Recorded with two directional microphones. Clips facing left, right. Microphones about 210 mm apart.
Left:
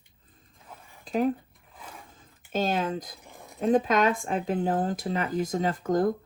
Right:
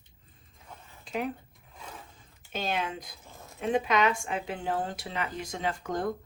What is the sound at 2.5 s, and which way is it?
Speech, 45° left (ahead or behind).